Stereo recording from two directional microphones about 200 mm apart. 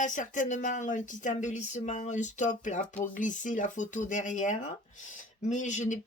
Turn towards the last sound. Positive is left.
turn(degrees=35)  # may be behind; listen again after turning